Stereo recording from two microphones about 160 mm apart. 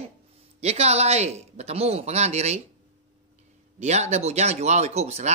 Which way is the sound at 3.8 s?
45° right (ahead or behind).